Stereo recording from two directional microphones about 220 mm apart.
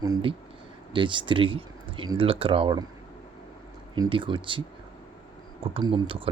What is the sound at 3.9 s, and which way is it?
Speech, 20° right (ahead or behind).